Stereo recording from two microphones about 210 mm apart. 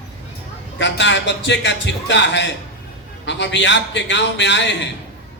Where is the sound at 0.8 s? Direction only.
60° left (ahead or behind).